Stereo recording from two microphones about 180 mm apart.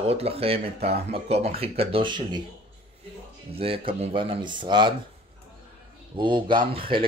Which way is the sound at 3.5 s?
30° right (ahead or behind).